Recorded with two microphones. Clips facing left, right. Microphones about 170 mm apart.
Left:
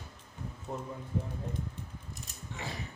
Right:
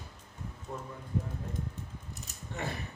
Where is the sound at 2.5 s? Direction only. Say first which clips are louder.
Right 4 dB; 55° right (ahead or behind).